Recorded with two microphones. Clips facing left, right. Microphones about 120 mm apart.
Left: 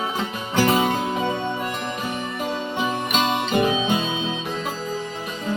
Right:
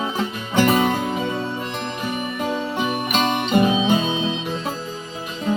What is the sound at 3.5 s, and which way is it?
Music, 30° right (ahead or behind).